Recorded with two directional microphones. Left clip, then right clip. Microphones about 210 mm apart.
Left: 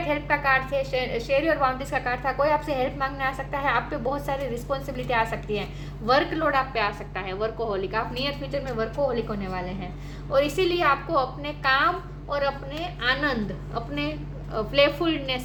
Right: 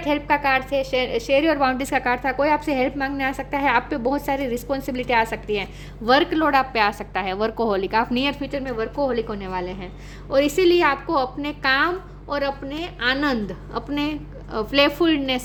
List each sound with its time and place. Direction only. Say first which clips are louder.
0.0 s a woman's voice: right 4 dB; 55° right (ahead or behind)